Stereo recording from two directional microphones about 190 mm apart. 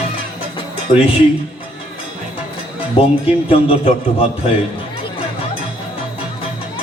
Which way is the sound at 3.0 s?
30° left (ahead or behind).